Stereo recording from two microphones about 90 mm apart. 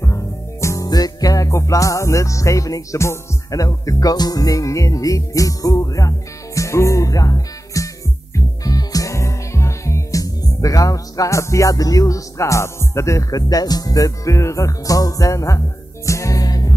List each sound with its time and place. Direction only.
0.0 s music: 35° left (ahead or behind)
0.8 s music: 45° left (ahead or behind)